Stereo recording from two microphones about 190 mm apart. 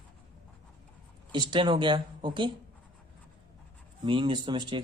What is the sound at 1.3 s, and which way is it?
Speech, 25° right (ahead or behind).